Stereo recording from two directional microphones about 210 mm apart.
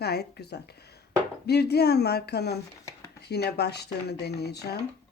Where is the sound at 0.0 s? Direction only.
50° left (ahead or behind).